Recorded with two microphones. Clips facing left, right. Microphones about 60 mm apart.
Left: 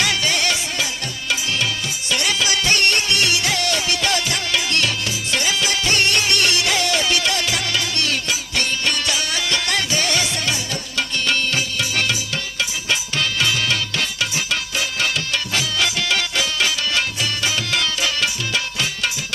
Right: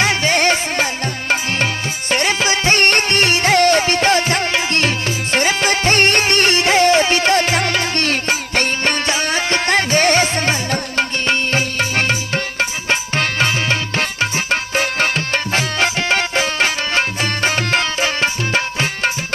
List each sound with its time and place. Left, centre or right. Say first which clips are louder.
0.0 s music: right 5 dB; right